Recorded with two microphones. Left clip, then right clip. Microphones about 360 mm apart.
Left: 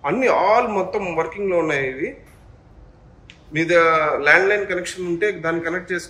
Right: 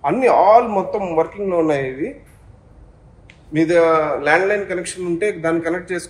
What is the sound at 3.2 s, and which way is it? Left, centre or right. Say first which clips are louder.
A man's voice: right 4 dB; centre.